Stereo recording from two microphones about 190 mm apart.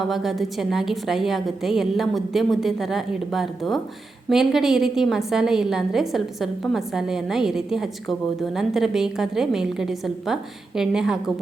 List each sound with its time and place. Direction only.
0.0 s a woman's voice: centre (ahead or behind)